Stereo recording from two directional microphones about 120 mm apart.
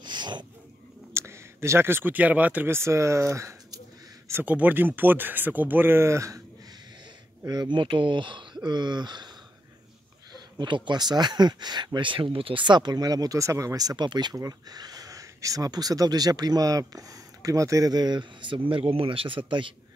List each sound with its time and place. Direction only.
0.0 s a sound: 40° right (ahead or behind)
1.1 s speech: 20° right (ahead or behind)
7.4 s speech: 35° right (ahead or behind)
10.6 s speech: 40° right (ahead or behind)